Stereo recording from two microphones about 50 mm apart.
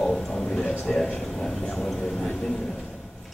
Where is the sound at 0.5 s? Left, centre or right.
Centre.